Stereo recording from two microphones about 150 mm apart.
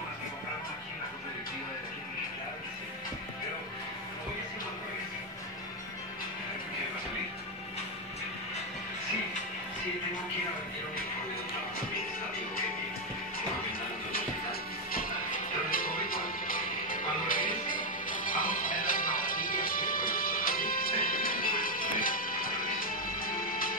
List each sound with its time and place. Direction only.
14.1 s music: 75° left (ahead or behind)